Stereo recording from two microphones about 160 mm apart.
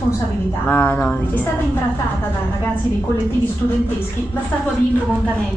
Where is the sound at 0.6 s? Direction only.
10° left (ahead or behind).